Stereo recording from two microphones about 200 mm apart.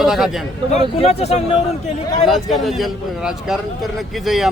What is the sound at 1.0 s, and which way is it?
Speech, 30° left (ahead or behind).